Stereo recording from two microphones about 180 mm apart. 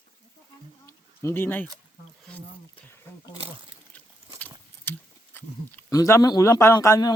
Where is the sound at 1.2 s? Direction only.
10° left (ahead or behind).